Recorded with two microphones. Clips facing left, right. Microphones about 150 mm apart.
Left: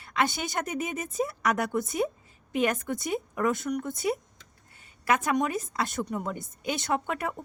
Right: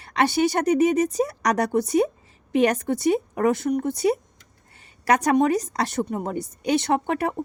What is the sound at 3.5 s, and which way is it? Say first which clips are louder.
Speech: right 7 dB; 65° right (ahead or behind).